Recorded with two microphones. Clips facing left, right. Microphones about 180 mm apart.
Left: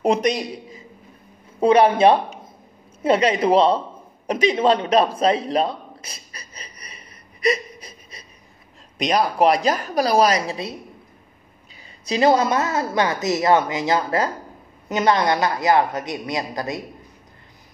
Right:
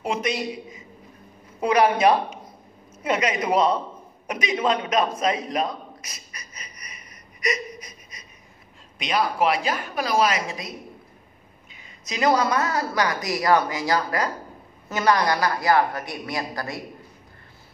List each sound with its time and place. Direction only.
0.0 s a man's voice: 40° left (ahead or behind)
4.3 s a sound: 30° left (ahead or behind)
8.9 s speech: 40° left (ahead or behind)
11.7 s a woman's voice: 30° left (ahead or behind)